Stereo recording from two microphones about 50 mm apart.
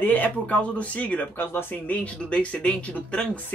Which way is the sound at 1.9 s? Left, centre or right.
Left.